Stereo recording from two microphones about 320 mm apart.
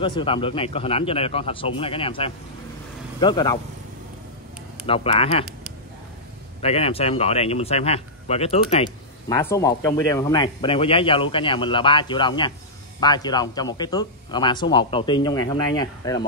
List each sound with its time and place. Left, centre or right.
0.0 s speech: centre
4.8 s speech: centre
6.6 s speech: centre